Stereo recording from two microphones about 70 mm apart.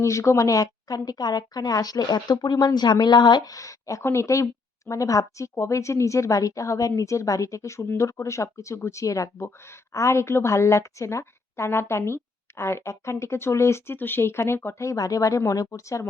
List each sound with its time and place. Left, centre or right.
0.0 s a woman's voice: left